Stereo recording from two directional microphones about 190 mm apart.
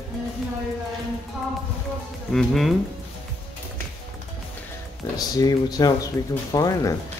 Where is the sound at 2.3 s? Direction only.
Centre (ahead or behind).